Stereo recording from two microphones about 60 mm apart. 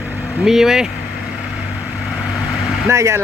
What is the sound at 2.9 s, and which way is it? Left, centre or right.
Speech, right.